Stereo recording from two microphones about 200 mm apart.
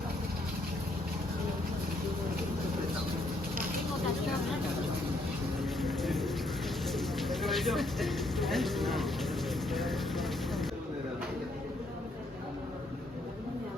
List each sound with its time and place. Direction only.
5.6 s vehicle: centre (ahead or behind)
6.8 s bird: centre (ahead or behind)
9.7 s vehicle: centre (ahead or behind)